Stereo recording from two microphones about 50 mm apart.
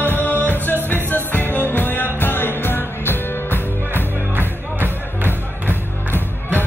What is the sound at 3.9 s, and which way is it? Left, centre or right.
Music, right.